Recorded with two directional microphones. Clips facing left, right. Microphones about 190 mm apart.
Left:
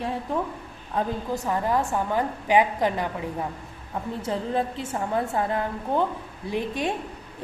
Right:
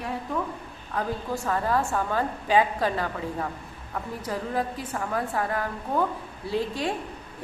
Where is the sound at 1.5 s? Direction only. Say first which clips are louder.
Left 1 dB; 15° left (ahead or behind).